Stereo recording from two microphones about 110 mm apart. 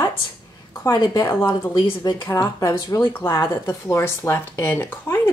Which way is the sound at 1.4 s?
20° left (ahead or behind).